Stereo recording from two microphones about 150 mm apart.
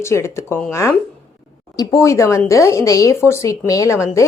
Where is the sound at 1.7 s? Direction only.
25° left (ahead or behind).